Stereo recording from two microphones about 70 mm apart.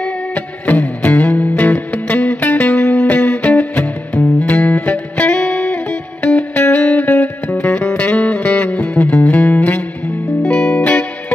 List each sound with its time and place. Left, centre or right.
0.0 s music: left
10.4 s music: centre